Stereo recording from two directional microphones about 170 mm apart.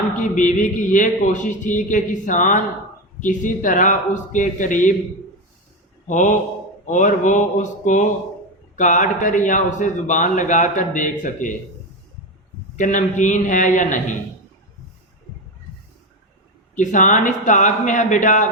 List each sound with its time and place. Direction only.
0.2 s a man's voice: 50° left (ahead or behind)
6.1 s a man's voice: 50° left (ahead or behind)
12.7 s a man's voice: 45° left (ahead or behind)
16.7 s a man's voice: 45° left (ahead or behind)